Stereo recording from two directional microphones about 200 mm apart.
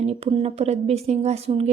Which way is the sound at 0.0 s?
30° right (ahead or behind).